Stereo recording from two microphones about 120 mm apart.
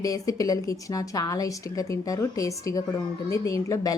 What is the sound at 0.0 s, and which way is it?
A woman's voice, 30° left (ahead or behind).